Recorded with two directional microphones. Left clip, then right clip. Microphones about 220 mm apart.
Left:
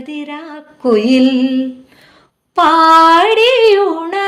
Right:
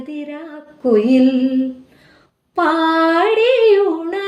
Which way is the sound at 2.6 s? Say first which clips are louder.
Left 8 dB; 5° left (ahead or behind).